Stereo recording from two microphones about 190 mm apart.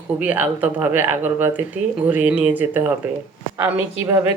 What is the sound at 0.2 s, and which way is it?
Speech, 10° right (ahead or behind).